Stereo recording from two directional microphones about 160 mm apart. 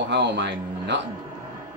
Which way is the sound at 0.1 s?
90° right.